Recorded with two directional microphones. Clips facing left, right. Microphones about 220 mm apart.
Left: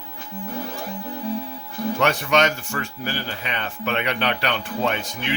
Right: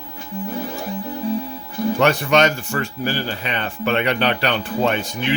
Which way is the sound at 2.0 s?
35° right (ahead or behind).